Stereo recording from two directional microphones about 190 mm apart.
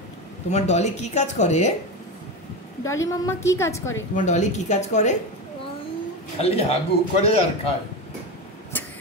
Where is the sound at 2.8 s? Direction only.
15° left (ahead or behind).